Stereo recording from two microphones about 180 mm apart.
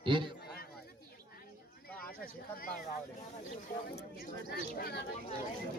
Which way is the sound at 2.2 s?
50° left (ahead or behind).